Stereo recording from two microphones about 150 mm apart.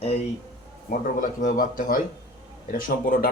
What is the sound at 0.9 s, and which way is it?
A man's voice, 60° left (ahead or behind).